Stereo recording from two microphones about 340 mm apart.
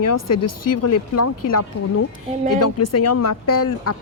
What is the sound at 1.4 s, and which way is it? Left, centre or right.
Speech, left.